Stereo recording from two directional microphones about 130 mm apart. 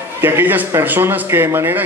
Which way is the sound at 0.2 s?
15° right (ahead or behind).